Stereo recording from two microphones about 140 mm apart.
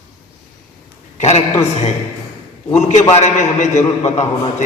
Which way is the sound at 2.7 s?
55° left (ahead or behind).